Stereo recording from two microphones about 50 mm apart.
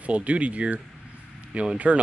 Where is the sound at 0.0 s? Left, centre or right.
Right.